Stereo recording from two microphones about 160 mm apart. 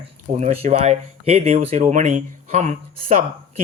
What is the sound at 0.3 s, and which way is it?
Speech, 45° right (ahead or behind).